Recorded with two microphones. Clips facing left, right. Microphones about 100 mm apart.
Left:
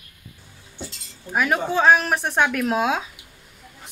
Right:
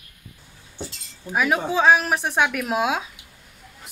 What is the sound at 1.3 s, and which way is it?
Speech, centre (ahead or behind).